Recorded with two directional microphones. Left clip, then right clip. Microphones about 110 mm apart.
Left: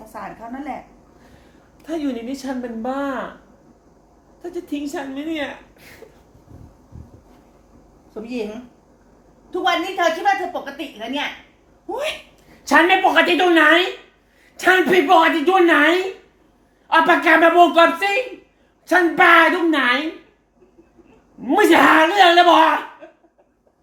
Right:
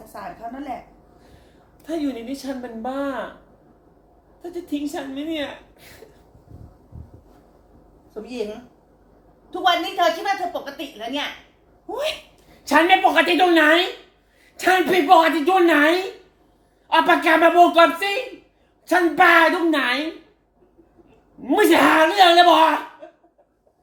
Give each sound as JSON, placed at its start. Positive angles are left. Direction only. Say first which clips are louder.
{"t": 0.1, "sound": "a woman's voice", "louder": "left 1 dB", "side_deg": 15}
{"t": 1.8, "sound": "a woman's voice", "louder": "left 1 dB", "side_deg": 15}
{"t": 4.4, "sound": "a woman's voice", "louder": "left 1 dB", "side_deg": 15}
{"t": 8.1, "sound": "a woman's voice", "louder": "left 2 dB", "side_deg": 15}
{"t": 9.5, "sound": "a woman's voice", "louder": "even", "side_deg": 15}
{"t": 21.4, "sound": "a woman's voice", "louder": "left 3 dB", "side_deg": 15}